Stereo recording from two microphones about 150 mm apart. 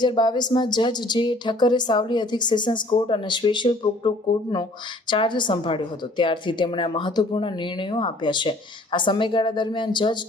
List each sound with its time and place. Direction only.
0.0 s a woman's voice: 30° left (ahead or behind)